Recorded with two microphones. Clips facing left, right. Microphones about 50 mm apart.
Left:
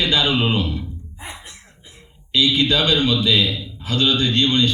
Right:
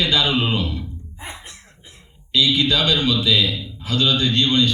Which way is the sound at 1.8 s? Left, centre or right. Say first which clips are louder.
Left 1 dB; left.